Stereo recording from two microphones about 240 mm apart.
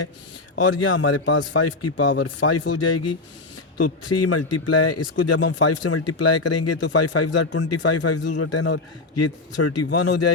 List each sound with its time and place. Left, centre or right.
0.6 s a man's voice: left
1.5 s a man's voice: left
2.0 s speech: left
2.4 s speech: left
6.9 s a man's voice: left